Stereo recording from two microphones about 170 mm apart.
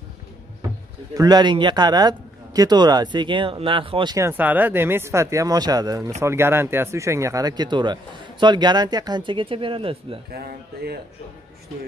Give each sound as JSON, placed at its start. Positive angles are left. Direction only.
{"t": 1.1, "sound": "speech", "side_deg": -25}
{"t": 4.3, "sound": "speech", "side_deg": -10}
{"t": 10.3, "sound": "speech", "side_deg": -70}